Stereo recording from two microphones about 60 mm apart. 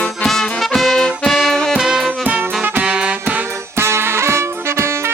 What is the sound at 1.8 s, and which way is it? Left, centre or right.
Music, centre.